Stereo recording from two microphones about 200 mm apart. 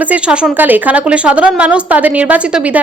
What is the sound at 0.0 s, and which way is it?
Speech, 5° right (ahead or behind).